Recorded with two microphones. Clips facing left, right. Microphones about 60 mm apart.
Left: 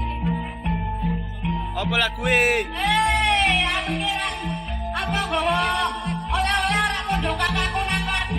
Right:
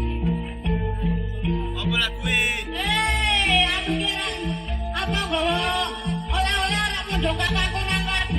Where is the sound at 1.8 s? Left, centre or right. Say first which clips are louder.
Left 3 dB; left.